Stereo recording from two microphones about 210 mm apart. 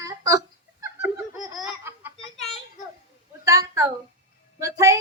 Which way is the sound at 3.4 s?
15° right (ahead or behind).